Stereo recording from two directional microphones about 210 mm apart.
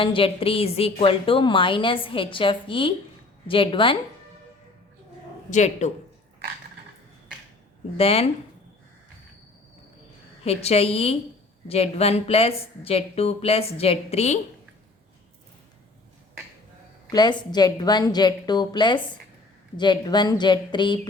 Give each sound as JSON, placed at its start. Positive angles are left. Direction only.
{"t": 0.0, "sound": "a woman's voice", "side_deg": 25}
{"t": 5.5, "sound": "speech", "side_deg": 35}
{"t": 7.9, "sound": "a woman's voice", "side_deg": 25}
{"t": 10.4, "sound": "a woman's voice", "side_deg": 30}
{"t": 17.1, "sound": "a woman's voice", "side_deg": 20}